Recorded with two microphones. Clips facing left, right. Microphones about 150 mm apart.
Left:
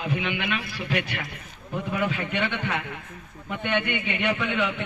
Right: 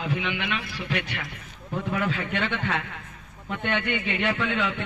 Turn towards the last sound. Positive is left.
turn(degrees=15)  # may be behind; listen again after turning